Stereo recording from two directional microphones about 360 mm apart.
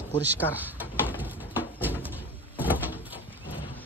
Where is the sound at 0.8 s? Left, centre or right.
Centre.